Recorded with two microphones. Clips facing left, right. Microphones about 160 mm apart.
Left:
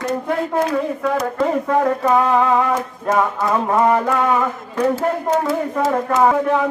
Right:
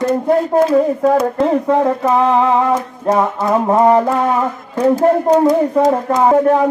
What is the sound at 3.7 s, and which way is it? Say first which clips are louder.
Mantra: right 5 dB; 30° right (ahead or behind).